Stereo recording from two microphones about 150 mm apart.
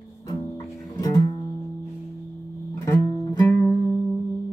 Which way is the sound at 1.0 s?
25° left (ahead or behind).